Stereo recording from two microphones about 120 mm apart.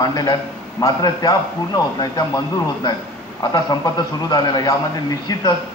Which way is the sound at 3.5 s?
35° left (ahead or behind).